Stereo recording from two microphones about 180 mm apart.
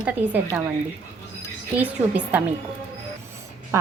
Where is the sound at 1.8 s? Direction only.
10° right (ahead or behind).